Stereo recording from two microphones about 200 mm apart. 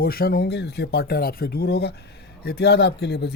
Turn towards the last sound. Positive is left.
turn(degrees=55)  # may be behind; listen again after turning